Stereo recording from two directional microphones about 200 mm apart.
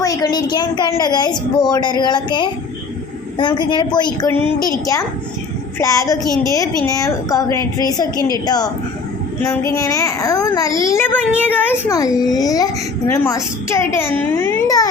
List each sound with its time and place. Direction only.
0.0 s a child's voice: 20° left (ahead or behind)